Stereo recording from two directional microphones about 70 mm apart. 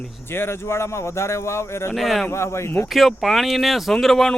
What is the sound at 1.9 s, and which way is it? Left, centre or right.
Speech, centre.